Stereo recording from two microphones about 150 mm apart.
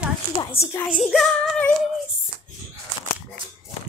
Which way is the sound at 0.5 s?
15° left (ahead or behind).